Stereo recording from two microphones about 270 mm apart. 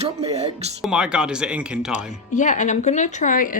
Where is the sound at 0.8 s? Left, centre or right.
Centre.